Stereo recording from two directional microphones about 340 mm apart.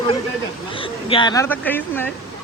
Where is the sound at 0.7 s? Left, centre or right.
Centre.